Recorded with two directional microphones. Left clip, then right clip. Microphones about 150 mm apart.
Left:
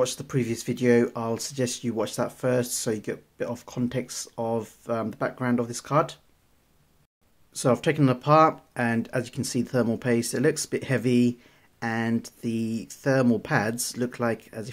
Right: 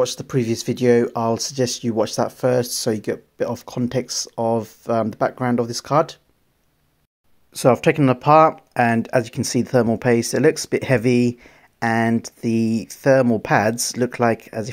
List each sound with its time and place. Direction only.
0.0 s speech: 30° right (ahead or behind)
7.5 s speech: 30° right (ahead or behind)